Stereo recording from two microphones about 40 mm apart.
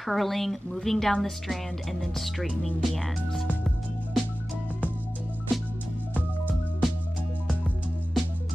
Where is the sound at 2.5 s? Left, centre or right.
Left.